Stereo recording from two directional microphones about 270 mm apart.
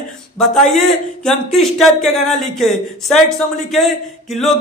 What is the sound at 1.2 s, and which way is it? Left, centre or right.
Speech, centre.